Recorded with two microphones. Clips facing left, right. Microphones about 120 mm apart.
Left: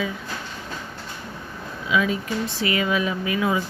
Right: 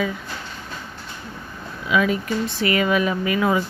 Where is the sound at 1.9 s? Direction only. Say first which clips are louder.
Right 3 dB; 60° right (ahead or behind).